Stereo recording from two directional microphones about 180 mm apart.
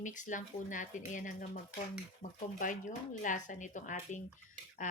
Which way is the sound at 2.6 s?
45° left (ahead or behind).